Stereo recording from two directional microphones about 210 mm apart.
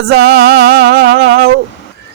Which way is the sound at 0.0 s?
50° right (ahead or behind).